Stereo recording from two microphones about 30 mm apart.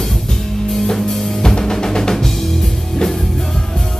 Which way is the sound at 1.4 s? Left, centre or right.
Left.